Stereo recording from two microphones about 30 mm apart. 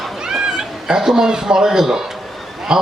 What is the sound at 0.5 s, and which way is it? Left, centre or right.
A man's voice, right.